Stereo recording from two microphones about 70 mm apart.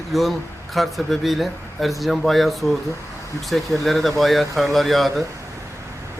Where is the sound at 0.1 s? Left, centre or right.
Centre.